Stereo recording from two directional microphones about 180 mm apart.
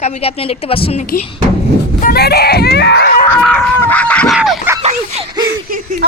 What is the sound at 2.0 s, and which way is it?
Speech, 60° left (ahead or behind).